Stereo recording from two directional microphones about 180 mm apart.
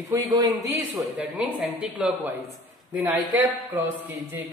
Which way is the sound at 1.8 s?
5° right (ahead or behind).